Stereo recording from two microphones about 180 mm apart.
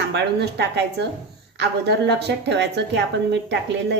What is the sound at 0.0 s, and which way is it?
A woman's voice, 70° right (ahead or behind).